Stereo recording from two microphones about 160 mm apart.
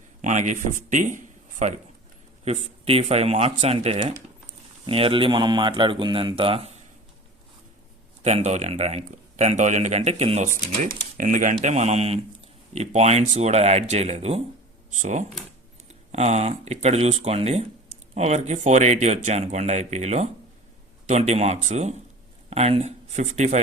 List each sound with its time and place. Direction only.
0.2 s speech: 50° right (ahead or behind)
2.4 s speech: 40° right (ahead or behind)
8.2 s speech: 45° right (ahead or behind)
10.8 s speech: 55° right (ahead or behind); by 14.4 s 40° right (ahead or behind)
14.8 s speech: 50° right (ahead or behind)